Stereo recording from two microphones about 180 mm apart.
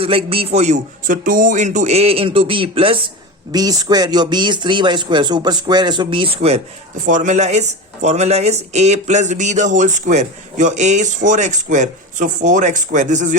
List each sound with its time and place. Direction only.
0.0 s speech: 30° right (ahead or behind)
7.0 s speech: 45° right (ahead or behind)